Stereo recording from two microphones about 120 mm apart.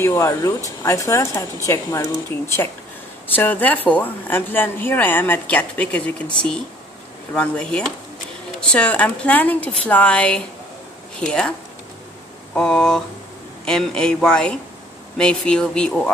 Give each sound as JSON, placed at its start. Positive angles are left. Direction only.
{"t": 0.0, "sound": "a woman's voice", "side_deg": 20}
{"t": 7.3, "sound": "a woman's voice", "side_deg": 10}
{"t": 12.5, "sound": "a woman's voice", "side_deg": 5}